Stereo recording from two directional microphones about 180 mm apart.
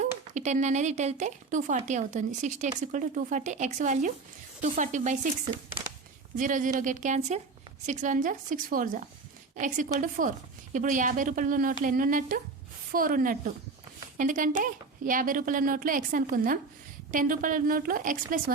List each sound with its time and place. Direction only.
0.0 s a woman's voice: 40° right (ahead or behind)
6.3 s a woman's voice: 45° right (ahead or behind)